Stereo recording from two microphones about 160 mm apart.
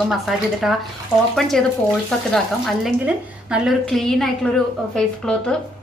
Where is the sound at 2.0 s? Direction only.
Centre (ahead or behind).